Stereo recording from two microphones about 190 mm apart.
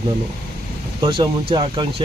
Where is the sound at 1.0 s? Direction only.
25° right (ahead or behind).